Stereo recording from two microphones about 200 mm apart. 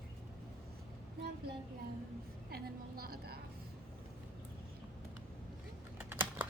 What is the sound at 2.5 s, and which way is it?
Speech, 50° right (ahead or behind).